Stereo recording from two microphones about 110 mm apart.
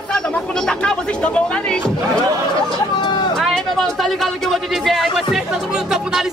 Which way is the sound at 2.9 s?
45° left (ahead or behind).